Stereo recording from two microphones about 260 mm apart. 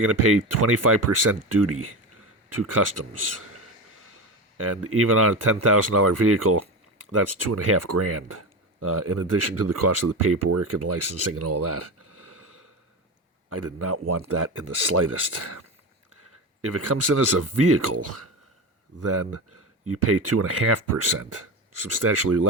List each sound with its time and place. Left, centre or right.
0.1 s speech: right
4.5 s speech: right
16.6 s speech: right